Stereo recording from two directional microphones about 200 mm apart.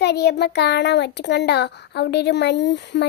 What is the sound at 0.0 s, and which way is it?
A child's voice, 55° left (ahead or behind).